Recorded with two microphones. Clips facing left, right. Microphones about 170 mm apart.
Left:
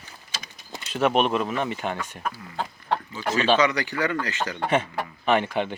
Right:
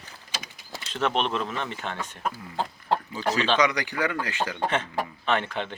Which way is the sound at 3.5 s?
15° right (ahead or behind).